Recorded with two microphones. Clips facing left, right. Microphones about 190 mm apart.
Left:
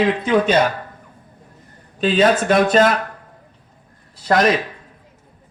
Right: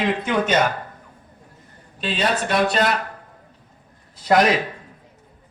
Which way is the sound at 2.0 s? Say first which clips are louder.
Left 8 dB; 45° left (ahead or behind).